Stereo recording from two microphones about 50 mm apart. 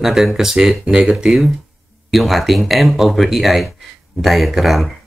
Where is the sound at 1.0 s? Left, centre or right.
Right.